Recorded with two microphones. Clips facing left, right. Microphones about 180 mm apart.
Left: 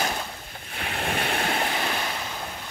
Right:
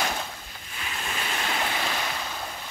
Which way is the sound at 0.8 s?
60° left (ahead or behind).